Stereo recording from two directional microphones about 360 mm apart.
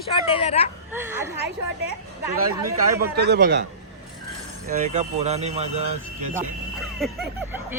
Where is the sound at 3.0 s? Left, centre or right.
Right.